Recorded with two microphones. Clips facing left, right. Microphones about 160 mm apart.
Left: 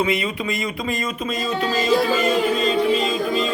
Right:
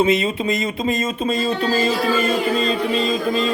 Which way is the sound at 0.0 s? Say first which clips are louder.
Right 4 dB; 25° right (ahead or behind).